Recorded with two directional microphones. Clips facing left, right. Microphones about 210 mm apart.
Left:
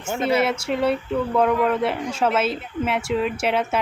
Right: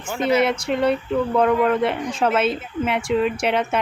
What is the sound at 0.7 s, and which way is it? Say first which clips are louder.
A woman's voice: right 2 dB; 5° left (ahead or behind).